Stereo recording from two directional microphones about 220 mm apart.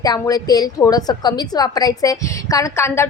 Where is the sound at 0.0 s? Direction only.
15° left (ahead or behind).